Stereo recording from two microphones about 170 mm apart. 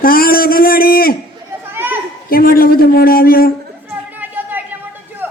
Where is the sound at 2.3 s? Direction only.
60° left (ahead or behind).